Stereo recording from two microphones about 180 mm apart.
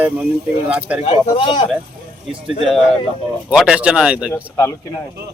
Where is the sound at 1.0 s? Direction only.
35° left (ahead or behind).